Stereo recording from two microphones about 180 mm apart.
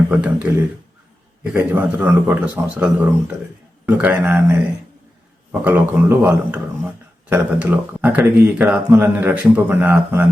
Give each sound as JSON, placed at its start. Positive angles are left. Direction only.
{"t": 0.1, "sound": "speech", "side_deg": -5}
{"t": 1.5, "sound": "speech", "side_deg": -10}